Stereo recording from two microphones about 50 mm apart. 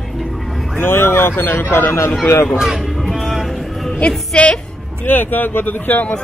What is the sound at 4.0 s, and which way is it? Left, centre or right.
Speech, left.